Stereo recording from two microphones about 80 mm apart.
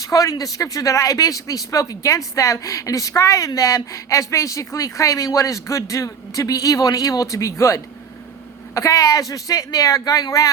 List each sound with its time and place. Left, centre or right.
0.0 s speech: left
8.7 s speech: left